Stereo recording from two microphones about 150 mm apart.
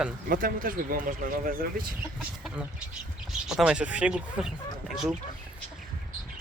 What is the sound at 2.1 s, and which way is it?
Speech, centre (ahead or behind).